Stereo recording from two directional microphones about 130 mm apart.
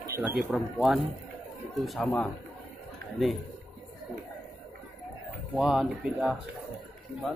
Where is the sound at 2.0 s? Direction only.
10° left (ahead or behind).